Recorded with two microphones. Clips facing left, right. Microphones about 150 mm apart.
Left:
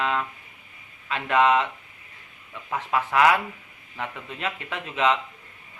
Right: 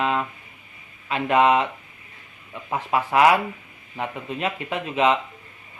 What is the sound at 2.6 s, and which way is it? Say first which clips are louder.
A man's voice: right 2 dB; 25° right (ahead or behind).